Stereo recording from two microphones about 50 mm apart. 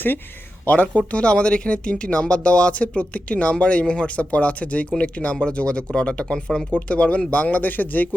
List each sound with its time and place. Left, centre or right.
0.6 s speech: left